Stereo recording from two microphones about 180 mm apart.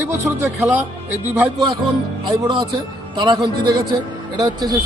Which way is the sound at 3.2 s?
25° right (ahead or behind).